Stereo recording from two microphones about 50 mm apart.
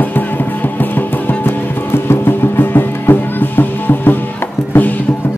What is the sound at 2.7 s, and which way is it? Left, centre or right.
Music, left.